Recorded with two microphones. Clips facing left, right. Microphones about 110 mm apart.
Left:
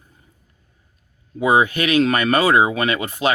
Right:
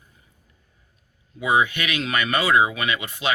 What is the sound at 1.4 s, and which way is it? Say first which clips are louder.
Speech: left 5 dB; 40° left (ahead or behind).